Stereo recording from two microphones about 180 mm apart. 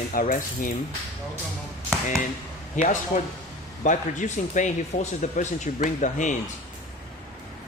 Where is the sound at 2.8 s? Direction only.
45° left (ahead or behind).